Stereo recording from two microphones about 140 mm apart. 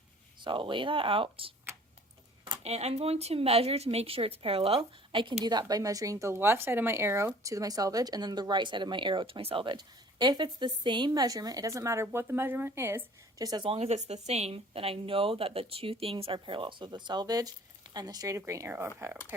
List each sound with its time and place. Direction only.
0.4 s speech: 35° right (ahead or behind)
2.6 s a woman's voice: 50° right (ahead or behind)
5.5 s speech: 30° right (ahead or behind)
13.7 s speech: 50° right (ahead or behind); by 19.1 s 15° right (ahead or behind)